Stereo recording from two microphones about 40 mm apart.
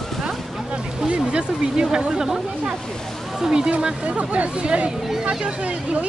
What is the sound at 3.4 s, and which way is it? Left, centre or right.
Speech, centre.